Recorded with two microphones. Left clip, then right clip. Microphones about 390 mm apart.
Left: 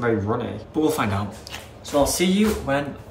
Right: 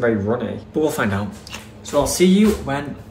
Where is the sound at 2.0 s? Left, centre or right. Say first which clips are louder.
Right 5 dB; centre.